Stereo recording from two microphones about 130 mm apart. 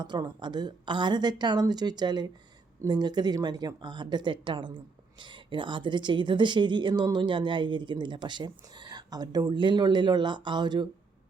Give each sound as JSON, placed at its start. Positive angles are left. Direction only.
{"t": 0.0, "sound": "a woman's voice", "side_deg": -35}